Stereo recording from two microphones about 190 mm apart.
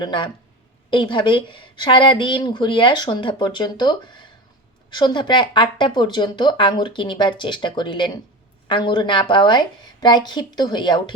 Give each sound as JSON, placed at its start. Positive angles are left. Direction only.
{"t": 0.0, "sound": "speech", "side_deg": 25}